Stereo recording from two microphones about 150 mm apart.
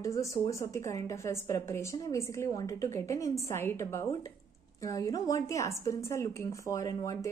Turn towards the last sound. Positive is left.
turn(degrees=25)  # may be behind; listen again after turning